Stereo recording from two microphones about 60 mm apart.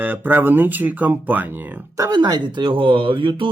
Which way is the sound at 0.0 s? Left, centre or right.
Right.